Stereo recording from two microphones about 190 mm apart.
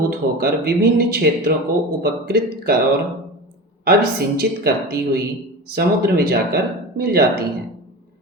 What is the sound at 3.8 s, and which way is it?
Speech, 55° right (ahead or behind).